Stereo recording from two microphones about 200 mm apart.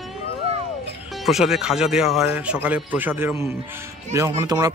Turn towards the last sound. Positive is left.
turn(degrees=-20)  # may be behind; listen again after turning